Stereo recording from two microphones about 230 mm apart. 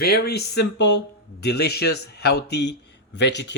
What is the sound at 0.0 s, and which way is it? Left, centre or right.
Speech, left.